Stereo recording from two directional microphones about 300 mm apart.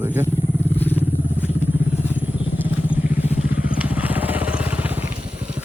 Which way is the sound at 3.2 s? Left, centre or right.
Left.